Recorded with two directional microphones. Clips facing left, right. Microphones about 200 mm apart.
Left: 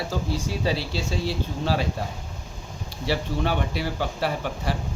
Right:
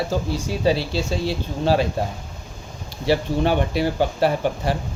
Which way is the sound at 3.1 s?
20° right (ahead or behind).